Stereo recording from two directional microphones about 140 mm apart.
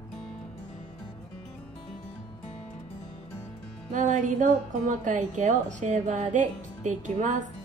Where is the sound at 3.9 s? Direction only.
60° right (ahead or behind).